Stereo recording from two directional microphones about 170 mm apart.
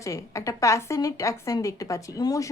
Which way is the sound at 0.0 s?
20° left (ahead or behind).